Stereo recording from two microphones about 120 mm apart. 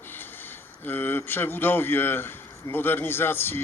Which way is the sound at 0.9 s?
15° left (ahead or behind).